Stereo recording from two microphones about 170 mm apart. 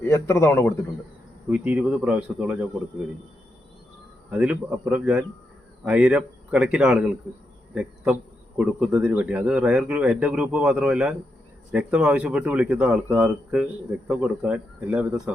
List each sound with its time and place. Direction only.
0.0 s a man's voice: 15° left (ahead or behind)
1.5 s speech: 10° right (ahead or behind)
4.3 s speech: 5° right (ahead or behind)